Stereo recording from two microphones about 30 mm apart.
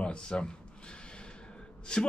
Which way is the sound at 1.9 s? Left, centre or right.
Left.